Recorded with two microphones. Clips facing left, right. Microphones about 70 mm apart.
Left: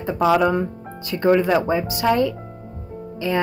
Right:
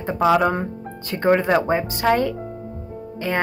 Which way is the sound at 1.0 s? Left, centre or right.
Right.